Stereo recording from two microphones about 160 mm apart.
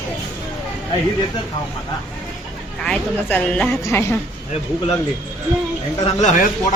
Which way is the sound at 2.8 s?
5° left (ahead or behind).